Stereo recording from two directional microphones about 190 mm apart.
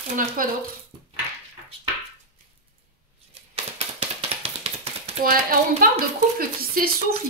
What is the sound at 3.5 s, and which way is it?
Tap, 30° right (ahead or behind).